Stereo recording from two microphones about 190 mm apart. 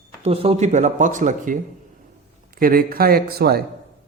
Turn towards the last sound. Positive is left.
turn(degrees=-55)  # may be behind; listen again after turning